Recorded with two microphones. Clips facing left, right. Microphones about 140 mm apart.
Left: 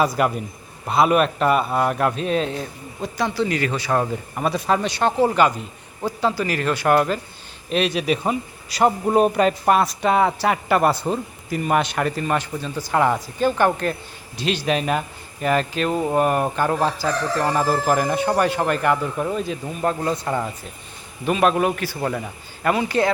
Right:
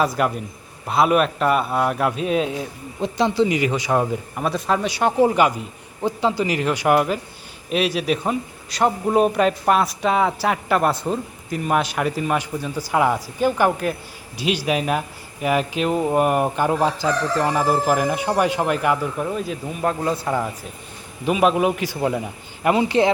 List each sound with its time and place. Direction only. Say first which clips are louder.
0.0 s a man's voice: left 1 dB; centre (ahead or behind)
3.0 s speech: right 4 dB; 20° right (ahead or behind)
4.4 s a man's voice: left 1 dB; centre (ahead or behind); by 23.1 s 20° right (ahead or behind)